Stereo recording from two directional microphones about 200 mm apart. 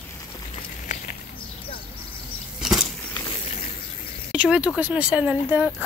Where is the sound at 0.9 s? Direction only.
35° left (ahead or behind).